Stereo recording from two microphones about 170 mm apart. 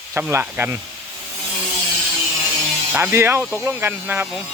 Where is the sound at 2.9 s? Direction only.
15° right (ahead or behind).